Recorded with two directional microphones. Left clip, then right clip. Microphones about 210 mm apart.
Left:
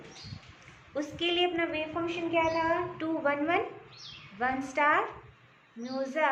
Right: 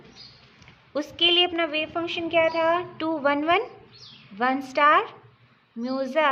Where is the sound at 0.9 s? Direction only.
40° right (ahead or behind).